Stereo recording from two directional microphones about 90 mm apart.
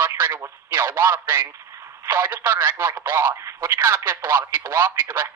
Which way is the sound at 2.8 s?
50° right (ahead or behind).